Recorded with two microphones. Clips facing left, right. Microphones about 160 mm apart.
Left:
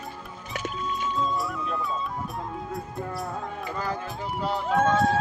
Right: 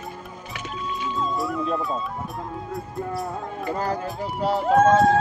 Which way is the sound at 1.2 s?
Centre (ahead or behind).